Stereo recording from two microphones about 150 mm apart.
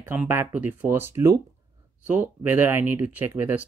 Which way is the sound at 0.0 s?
15° right (ahead or behind).